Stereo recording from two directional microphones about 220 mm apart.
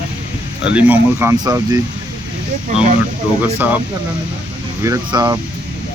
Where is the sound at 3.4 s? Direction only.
10° right (ahead or behind).